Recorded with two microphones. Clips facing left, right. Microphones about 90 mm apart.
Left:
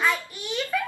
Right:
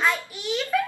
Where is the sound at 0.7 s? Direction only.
5° right (ahead or behind).